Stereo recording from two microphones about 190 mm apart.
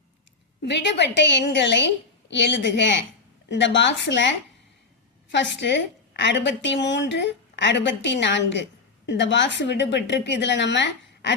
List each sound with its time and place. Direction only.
0.6 s a woman's voice: 65° left (ahead or behind)